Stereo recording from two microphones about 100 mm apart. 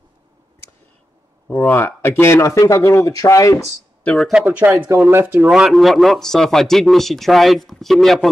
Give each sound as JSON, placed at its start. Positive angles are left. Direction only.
{"t": 1.5, "sound": "speech", "side_deg": 20}
{"t": 4.0, "sound": "a man's voice", "side_deg": 5}
{"t": 4.5, "sound": "speech", "side_deg": -15}
{"t": 5.5, "sound": "a man's voice", "side_deg": -5}